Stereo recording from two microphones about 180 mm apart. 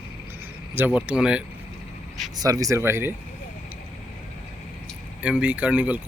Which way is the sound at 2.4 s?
20° right (ahead or behind).